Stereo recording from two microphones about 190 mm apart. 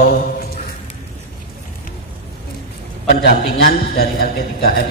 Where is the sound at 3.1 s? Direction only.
55° left (ahead or behind).